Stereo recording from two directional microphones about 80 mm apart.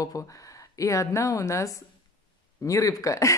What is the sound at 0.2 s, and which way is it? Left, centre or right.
A woman's voice, left.